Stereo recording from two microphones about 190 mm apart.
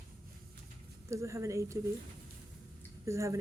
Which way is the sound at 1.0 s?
15° right (ahead or behind).